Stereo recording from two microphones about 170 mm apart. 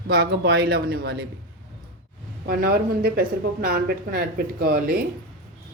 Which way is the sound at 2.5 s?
60° right (ahead or behind).